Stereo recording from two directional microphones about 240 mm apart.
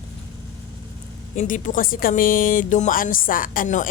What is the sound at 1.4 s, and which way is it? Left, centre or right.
Speech, left.